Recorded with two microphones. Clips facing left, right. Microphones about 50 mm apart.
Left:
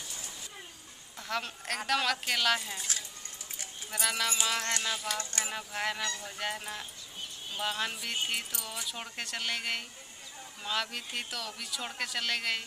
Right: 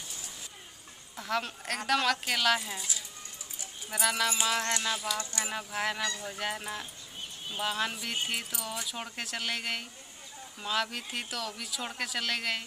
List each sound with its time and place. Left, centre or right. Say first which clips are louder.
1.1 s speech: right 3 dB; centre
3.9 s speech: right 3 dB; centre